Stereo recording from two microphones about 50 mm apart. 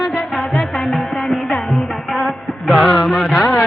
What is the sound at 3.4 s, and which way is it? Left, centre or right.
Speech, centre.